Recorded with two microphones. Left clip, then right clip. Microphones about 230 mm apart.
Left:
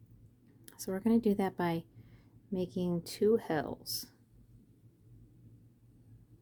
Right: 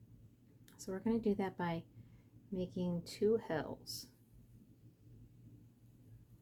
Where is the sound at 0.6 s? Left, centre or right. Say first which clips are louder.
Left 6 dB; left.